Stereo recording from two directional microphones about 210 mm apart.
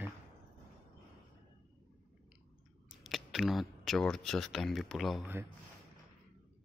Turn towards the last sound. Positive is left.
turn(degrees=-5)  # may be behind; listen again after turning